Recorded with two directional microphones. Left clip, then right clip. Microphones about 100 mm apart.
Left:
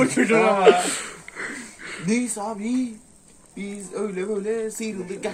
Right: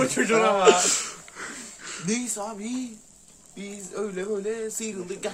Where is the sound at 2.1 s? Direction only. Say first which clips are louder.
Left 5 dB; 40° right (ahead or behind).